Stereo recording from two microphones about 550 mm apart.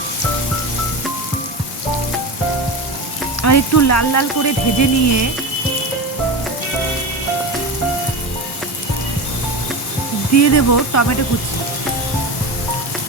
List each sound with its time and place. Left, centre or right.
3.4 s speech: left
10.3 s speech: left